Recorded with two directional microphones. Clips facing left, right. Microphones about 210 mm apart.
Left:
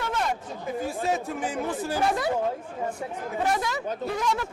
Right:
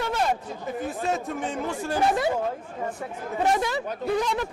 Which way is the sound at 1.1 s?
Centre (ahead or behind).